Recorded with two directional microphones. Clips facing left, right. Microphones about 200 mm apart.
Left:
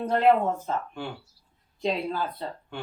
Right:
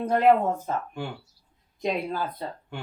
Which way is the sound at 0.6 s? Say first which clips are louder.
Right 1 dB; 10° right (ahead or behind).